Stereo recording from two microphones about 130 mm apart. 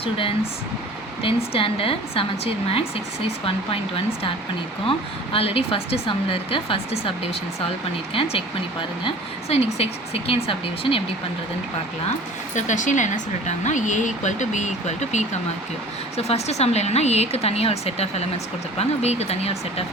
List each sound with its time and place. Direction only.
0.0 s speech: 45° left (ahead or behind)
12.5 s a woman's voice: 70° left (ahead or behind); by 19.8 s 55° left (ahead or behind)